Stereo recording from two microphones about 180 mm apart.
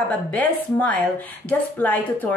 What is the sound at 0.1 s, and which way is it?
Speech, 10° left (ahead or behind).